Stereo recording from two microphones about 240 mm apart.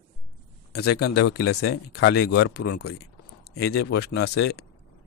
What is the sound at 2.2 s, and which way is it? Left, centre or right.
Speech, left.